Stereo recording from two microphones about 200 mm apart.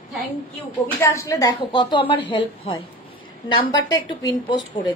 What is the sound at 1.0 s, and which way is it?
A woman's voice, 15° left (ahead or behind).